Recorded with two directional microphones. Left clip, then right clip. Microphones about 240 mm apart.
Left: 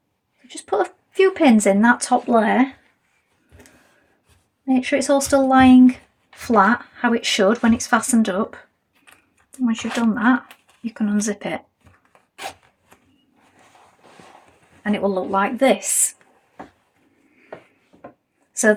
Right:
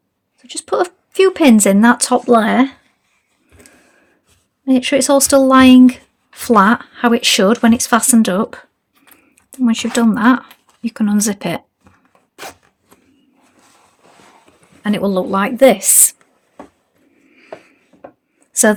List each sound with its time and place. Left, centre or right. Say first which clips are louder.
0.4 s speech: right 4 dB; right
4.6 s speech: right 6 dB; right
14.8 s speech: right 4 dB; right
17.9 s rub: right 4 dB; right